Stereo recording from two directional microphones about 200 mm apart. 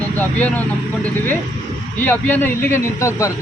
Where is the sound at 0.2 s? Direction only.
10° left (ahead or behind).